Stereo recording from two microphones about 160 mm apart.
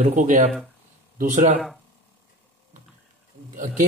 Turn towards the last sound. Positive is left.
turn(degrees=-55)  # may be behind; listen again after turning